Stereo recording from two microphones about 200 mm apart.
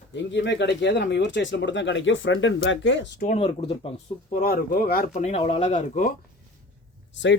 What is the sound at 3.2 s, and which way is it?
Speech, 30° left (ahead or behind).